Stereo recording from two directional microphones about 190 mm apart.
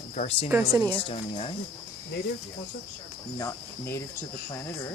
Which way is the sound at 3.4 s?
15° left (ahead or behind).